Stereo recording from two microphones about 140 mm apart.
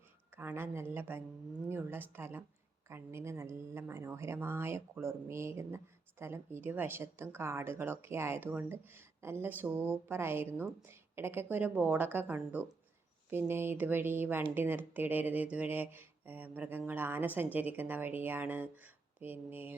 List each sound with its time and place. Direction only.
0.3 s a woman's voice: 15° right (ahead or behind)